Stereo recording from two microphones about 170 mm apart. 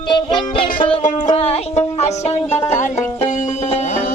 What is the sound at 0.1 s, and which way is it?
Music, 30° left (ahead or behind).